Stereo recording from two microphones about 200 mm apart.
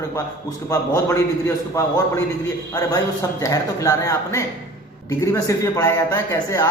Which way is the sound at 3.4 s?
15° left (ahead or behind).